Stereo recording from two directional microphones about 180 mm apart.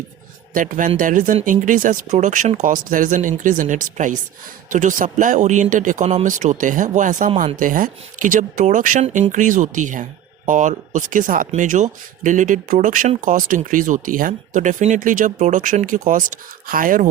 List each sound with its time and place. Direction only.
0.5 s speech: 45° right (ahead or behind)